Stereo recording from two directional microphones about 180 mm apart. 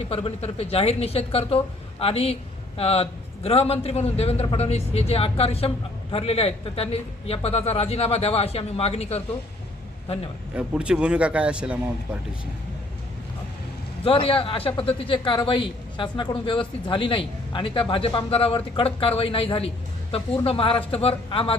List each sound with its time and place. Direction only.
0.0 s a woman's voice: 30° left (ahead or behind)
10.5 s speech: 5° right (ahead or behind)
14.0 s a woman's voice: 30° left (ahead or behind)